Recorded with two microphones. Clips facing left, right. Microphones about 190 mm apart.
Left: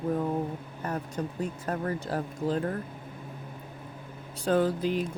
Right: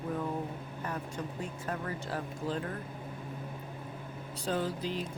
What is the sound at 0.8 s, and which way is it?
Speech, 40° left (ahead or behind).